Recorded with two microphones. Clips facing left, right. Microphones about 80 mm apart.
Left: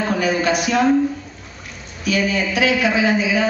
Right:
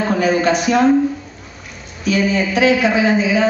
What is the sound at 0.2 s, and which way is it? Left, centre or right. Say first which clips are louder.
Speech: right 4 dB; right.